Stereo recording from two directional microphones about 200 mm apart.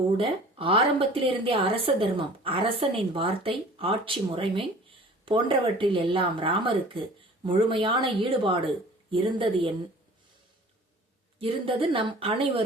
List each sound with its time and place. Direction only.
0.2 s a woman's voice: 25° right (ahead or behind)
11.3 s a woman's voice: 25° right (ahead or behind)